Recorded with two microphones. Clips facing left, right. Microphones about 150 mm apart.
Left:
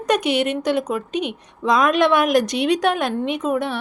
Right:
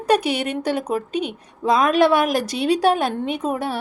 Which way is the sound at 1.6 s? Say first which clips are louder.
Right 1 dB; 30° right (ahead or behind).